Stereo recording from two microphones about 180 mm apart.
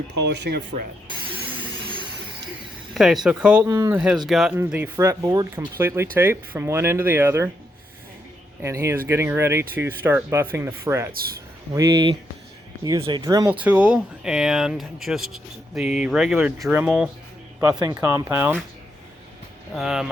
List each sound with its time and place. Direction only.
0.3 s speech: 70° right (ahead or behind)
2.9 s speech: centre (ahead or behind)
4.3 s speech: 5° right (ahead or behind)
8.6 s speech: 15° right (ahead or behind)
13.5 s speech: 10° right (ahead or behind)
17.6 s speech: 20° right (ahead or behind)
19.7 s speech: 5° right (ahead or behind)